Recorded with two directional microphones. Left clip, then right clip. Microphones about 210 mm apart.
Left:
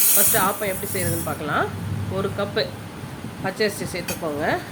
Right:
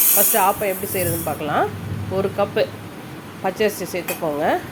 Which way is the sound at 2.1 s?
15° right (ahead or behind).